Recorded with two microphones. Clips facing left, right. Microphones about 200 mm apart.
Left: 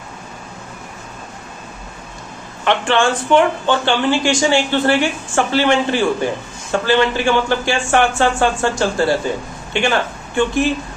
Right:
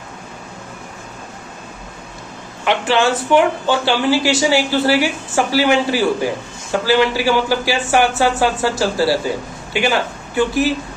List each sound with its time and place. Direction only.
2.6 s speech: 5° right (ahead or behind)